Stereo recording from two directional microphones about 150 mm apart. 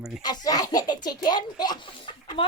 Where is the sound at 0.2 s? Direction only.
25° left (ahead or behind).